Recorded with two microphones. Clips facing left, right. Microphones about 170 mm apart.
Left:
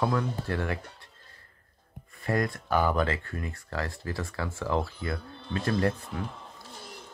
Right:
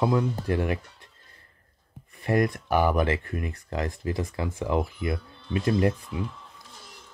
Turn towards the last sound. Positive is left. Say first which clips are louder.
# right 3 dB
turn(degrees=60)  # may be behind; listen again after turning